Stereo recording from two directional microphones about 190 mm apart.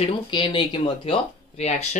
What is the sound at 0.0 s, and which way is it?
Speech, 25° left (ahead or behind).